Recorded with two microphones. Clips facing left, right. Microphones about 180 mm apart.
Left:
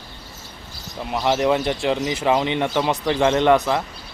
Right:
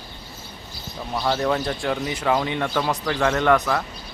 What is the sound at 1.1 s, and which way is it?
A man's voice, 20° left (ahead or behind).